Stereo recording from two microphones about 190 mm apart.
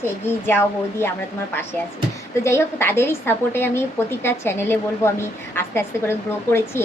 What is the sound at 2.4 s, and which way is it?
A woman's voice, 15° left (ahead or behind).